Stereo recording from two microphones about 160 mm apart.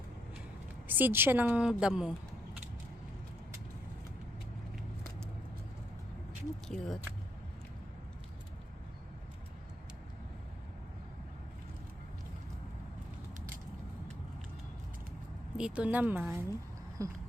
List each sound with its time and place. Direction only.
0.9 s speech: 10° right (ahead or behind)
6.7 s speech: centre (ahead or behind)
15.5 s speech: 5° right (ahead or behind)
17.0 s a sound: 20° right (ahead or behind)